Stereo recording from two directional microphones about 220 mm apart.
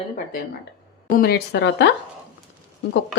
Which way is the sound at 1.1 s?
45° left (ahead or behind).